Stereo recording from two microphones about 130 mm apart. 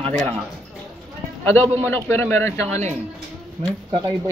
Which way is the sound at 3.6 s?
35° right (ahead or behind).